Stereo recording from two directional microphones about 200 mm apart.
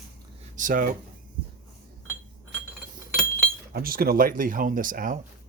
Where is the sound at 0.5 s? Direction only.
40° right (ahead or behind).